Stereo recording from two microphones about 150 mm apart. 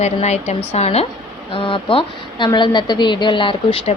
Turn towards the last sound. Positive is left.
turn(degrees=35)  # may be behind; listen again after turning